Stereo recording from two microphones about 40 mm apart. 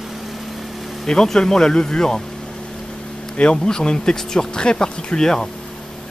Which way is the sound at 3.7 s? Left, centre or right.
Centre.